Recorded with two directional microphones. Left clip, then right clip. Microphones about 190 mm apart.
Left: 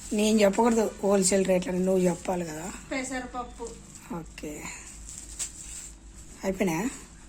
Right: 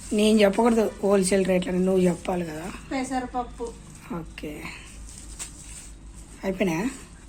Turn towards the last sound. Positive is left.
turn(degrees=20)  # may be behind; listen again after turning